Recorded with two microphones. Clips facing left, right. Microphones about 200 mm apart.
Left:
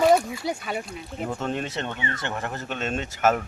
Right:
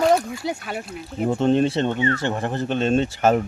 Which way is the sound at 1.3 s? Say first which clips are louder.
Right 12 dB; 30° right (ahead or behind).